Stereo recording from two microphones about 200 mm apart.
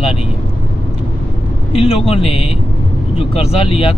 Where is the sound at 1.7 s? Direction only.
30° left (ahead or behind).